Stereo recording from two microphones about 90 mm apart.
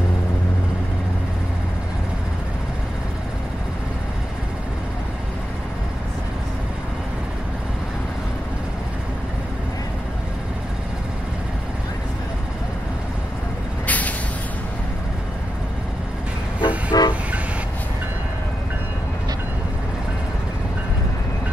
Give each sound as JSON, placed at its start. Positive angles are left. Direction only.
{"t": 13.8, "sound": "vehicle", "side_deg": 15}
{"t": 16.6, "sound": "vehicle", "side_deg": 50}